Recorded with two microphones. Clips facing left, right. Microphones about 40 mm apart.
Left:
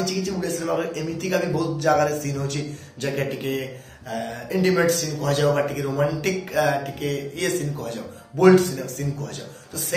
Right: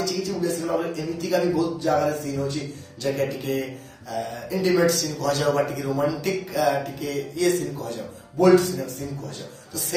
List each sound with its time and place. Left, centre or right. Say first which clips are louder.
0.0 s a man's voice: even; left
3.0 s mantra: right 1 dB; left
4.1 s a man's voice: left 1 dB; left